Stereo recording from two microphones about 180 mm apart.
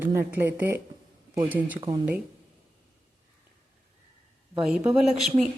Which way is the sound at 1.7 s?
25° right (ahead or behind).